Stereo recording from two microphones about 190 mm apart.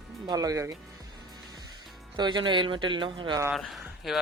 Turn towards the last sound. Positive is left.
turn(degrees=0)  # may be behind; listen again after turning